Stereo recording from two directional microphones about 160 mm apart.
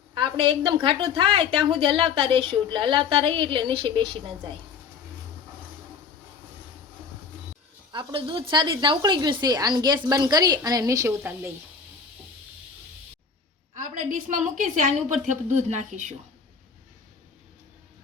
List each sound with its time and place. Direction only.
0.1 s a woman's voice: 30° right (ahead or behind)
7.9 s a woman's voice: 35° right (ahead or behind); by 11.5 s 15° right (ahead or behind)
13.7 s a woman's voice: 55° right (ahead or behind)